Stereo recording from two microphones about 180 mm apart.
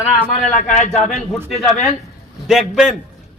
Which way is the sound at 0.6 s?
45° left (ahead or behind).